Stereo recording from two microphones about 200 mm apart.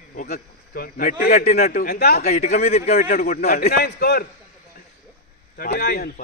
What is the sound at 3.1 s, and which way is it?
A man's voice, 50° left (ahead or behind).